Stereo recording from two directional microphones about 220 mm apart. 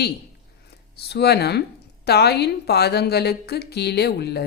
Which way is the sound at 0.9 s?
45° left (ahead or behind).